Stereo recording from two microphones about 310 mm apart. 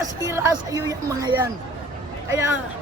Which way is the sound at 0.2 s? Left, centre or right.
Centre.